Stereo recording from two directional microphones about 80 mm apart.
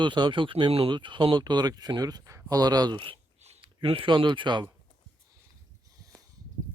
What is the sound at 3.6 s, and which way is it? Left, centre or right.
Speech, right.